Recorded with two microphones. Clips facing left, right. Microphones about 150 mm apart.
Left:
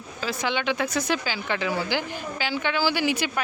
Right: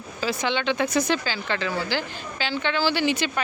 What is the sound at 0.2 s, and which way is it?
Speech, centre (ahead or behind).